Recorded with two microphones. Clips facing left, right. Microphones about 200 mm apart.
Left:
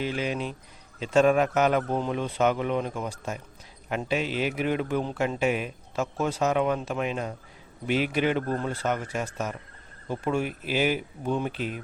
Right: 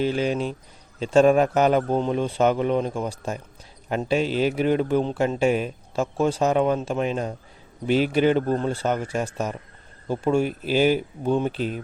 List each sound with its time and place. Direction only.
0.0 s a man's voice: 35° right (ahead or behind)